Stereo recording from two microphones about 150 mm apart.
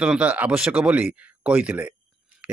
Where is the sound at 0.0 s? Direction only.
10° right (ahead or behind).